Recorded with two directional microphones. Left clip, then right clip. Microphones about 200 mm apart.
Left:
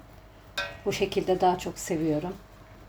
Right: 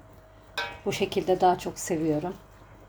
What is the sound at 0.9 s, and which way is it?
Speech, 5° right (ahead or behind).